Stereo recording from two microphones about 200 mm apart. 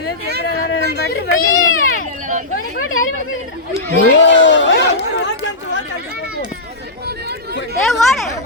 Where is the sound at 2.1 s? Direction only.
40° right (ahead or behind).